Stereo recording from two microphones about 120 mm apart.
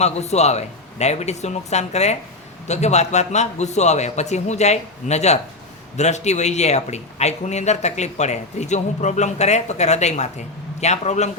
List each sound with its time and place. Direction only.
0.0 s speech: 65° left (ahead or behind)